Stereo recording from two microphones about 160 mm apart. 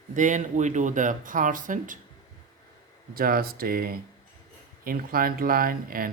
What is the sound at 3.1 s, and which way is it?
Speech, 65° right (ahead or behind).